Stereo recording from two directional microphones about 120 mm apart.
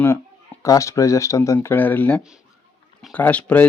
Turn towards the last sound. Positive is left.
turn(degrees=10)  # may be behind; listen again after turning